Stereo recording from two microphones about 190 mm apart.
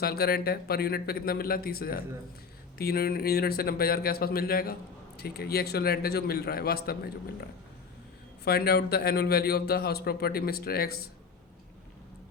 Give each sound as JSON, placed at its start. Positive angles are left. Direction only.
{"t": 0.0, "sound": "speech", "side_deg": 55}
{"t": 8.4, "sound": "a man's voice", "side_deg": 55}